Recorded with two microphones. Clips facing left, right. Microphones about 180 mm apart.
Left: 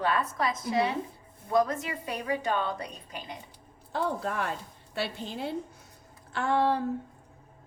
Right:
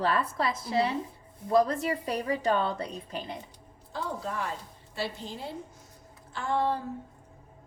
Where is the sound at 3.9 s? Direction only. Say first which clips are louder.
Left 4 dB; 60° left (ahead or behind).